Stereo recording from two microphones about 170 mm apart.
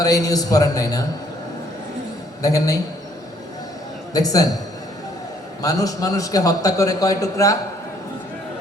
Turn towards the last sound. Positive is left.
turn(degrees=20)  # may be behind; listen again after turning